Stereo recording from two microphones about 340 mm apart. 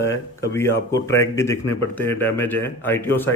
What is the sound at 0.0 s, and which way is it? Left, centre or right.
Speech, centre.